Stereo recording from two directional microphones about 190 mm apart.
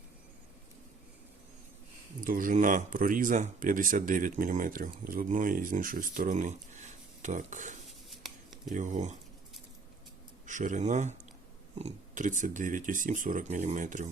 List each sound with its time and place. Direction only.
2.2 s speech: 45° right (ahead or behind)
7.9 s a sound: centre (ahead or behind)
8.7 s speech: 40° right (ahead or behind)
10.4 s speech: 40° right (ahead or behind)